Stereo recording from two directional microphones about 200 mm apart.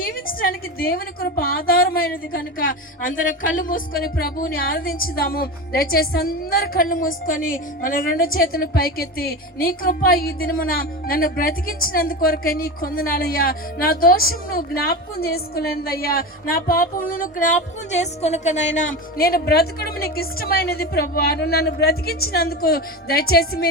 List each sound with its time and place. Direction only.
0.0 s a woman's voice: 45° left (ahead or behind)